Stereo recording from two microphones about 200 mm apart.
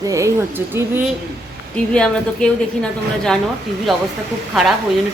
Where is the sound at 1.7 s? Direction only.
5° left (ahead or behind).